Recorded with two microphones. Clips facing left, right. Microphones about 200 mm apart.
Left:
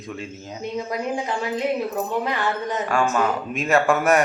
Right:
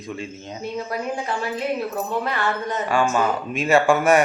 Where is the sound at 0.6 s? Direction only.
15° left (ahead or behind).